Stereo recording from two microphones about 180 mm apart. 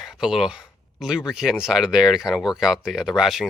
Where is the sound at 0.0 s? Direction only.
Centre (ahead or behind).